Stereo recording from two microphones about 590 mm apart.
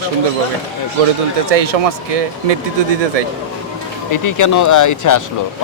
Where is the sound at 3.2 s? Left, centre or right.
Right.